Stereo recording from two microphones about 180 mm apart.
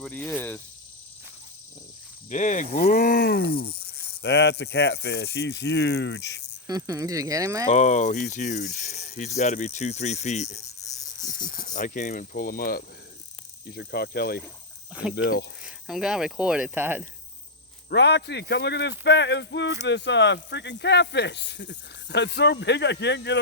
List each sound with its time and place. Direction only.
0.0 s speech: 10° left (ahead or behind)
2.3 s speech: 45° left (ahead or behind); by 6.4 s 70° left (ahead or behind)
6.7 s speech: 20° right (ahead or behind)
7.7 s speech: 45° left (ahead or behind)
11.3 s speech: 50° left (ahead or behind); by 15.4 s 70° left (ahead or behind)
15.6 s speech: 5° right (ahead or behind)
17.8 s speech: 70° left (ahead or behind)